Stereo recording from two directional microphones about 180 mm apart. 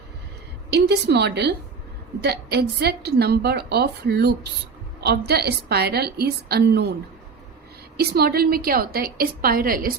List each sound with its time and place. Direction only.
0.7 s a woman's voice: 70° right (ahead or behind)
7.9 s a woman's voice: 60° right (ahead or behind)